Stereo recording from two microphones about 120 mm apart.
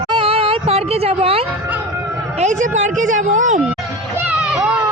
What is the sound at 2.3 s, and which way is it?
A woman's voice, 85° right.